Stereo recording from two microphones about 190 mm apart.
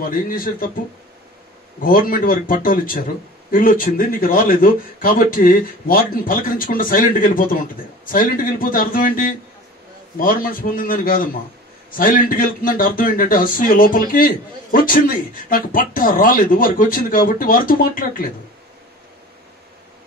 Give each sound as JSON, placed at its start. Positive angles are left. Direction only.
{"t": 0.1, "sound": "speech", "side_deg": 50}
{"t": 1.8, "sound": "speech", "side_deg": 45}